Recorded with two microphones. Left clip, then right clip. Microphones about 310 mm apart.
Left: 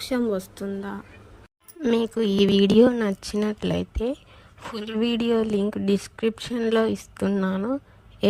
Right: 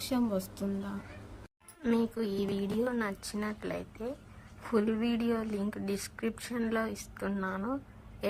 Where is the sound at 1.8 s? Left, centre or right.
Left.